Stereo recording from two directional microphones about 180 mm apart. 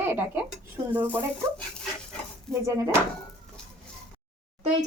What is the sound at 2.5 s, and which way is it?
Speech, 15° right (ahead or behind).